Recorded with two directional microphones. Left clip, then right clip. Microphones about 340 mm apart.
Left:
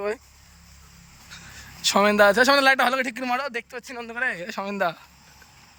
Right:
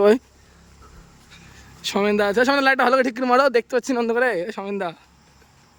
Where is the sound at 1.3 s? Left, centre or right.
Centre.